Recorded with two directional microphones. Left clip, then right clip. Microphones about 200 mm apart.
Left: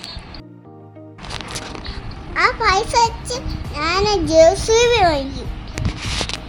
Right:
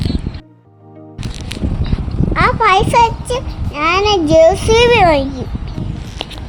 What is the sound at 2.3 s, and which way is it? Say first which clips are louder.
A child's voice: right 5 dB; 25° right (ahead or behind).